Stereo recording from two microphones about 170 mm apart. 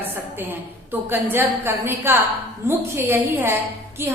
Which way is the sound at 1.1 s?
10° right (ahead or behind).